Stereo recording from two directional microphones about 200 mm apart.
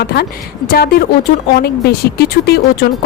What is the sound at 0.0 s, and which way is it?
Speech, 50° left (ahead or behind).